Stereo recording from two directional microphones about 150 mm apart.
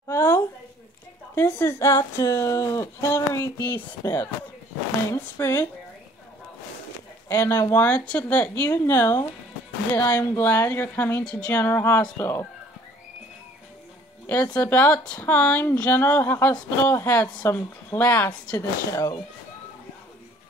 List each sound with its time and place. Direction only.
0.1 s a sound: 20° left (ahead or behind)
1.3 s a woman's voice: 15° left (ahead or behind)
7.2 s speech: 15° left (ahead or behind)
14.2 s speech: 15° left (ahead or behind)